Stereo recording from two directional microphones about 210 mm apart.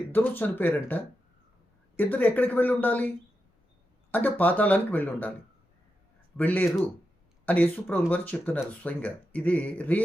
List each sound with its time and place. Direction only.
0.1 s speech: 10° left (ahead or behind)
4.1 s speech: 10° left (ahead or behind)
6.3 s speech: 10° left (ahead or behind)